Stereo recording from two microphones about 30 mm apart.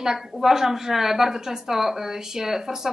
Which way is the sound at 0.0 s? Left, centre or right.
Centre.